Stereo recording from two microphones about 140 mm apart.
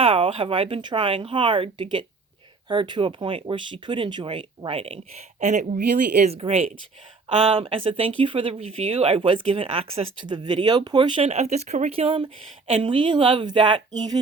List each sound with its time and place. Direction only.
0.0 s speech: 40° right (ahead or behind)
5.4 s speech: 60° right (ahead or behind)
6.2 s speech: 45° right (ahead or behind)
11.3 s speech: 50° right (ahead or behind); by 14.2 s 30° right (ahead or behind)